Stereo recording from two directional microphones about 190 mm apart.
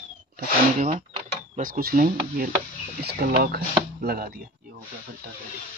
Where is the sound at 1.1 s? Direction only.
45° right (ahead or behind).